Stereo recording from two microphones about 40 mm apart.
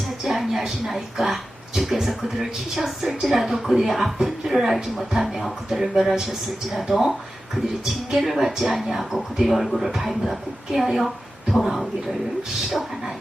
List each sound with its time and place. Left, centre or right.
0.3 s speech: centre
8.1 s speech: centre